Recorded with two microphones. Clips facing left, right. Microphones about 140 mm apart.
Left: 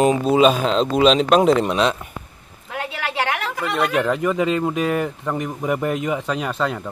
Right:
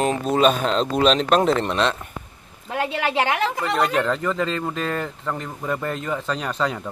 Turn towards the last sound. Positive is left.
turn(degrees=0)  # may be behind; listen again after turning